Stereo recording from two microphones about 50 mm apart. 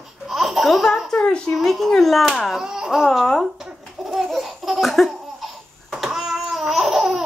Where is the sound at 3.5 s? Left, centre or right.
Centre.